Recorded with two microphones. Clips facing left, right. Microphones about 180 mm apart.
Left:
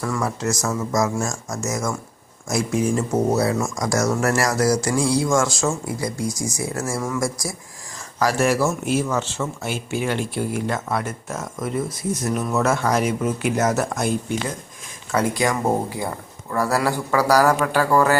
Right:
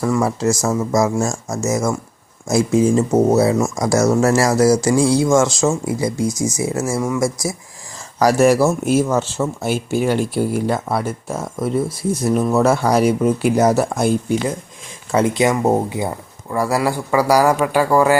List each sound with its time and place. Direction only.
0.0 s speech: 30° right (ahead or behind)
8.2 s speech: 40° right (ahead or behind)
15.1 s speech: 25° right (ahead or behind)